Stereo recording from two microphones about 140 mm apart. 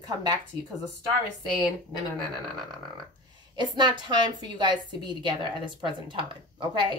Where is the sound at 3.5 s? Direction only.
30° right (ahead or behind).